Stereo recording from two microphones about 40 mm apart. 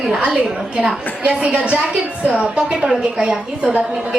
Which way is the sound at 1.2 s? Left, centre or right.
Right.